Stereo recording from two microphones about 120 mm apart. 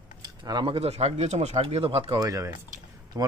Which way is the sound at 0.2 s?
35° right (ahead or behind).